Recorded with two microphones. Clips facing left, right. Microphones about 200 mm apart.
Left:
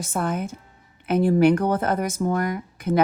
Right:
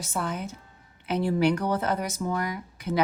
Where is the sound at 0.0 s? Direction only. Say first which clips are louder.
Left 5 dB; 50° left (ahead or behind).